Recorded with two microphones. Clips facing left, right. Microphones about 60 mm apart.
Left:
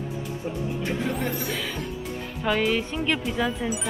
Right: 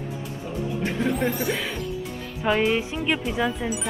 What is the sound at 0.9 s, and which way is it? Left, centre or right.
Speech, right.